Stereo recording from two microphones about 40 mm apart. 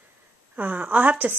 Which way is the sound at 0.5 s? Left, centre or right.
Right.